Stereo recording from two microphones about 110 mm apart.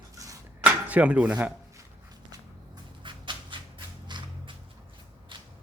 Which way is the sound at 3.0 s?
45° right (ahead or behind).